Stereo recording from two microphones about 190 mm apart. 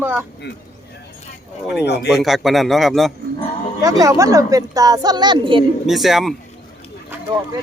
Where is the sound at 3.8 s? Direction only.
20° right (ahead or behind).